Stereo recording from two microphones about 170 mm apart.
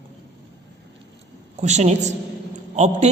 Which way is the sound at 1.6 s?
45° right (ahead or behind).